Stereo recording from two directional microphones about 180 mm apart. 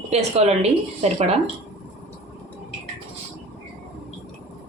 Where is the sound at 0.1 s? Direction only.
35° right (ahead or behind).